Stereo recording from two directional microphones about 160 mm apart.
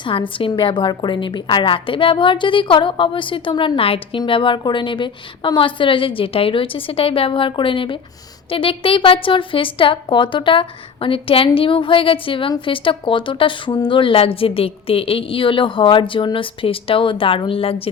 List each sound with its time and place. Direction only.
0.0 s a woman's voice: 35° left (ahead or behind)